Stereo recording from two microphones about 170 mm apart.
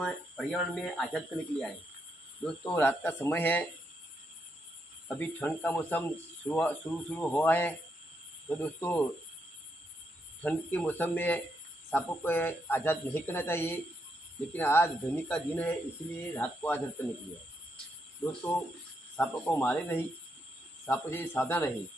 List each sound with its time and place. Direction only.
0.0 s speech: centre (ahead or behind)
5.0 s speech: 10° left (ahead or behind)
10.4 s speech: 10° left (ahead or behind)
19.1 s speech: 10° left (ahead or behind)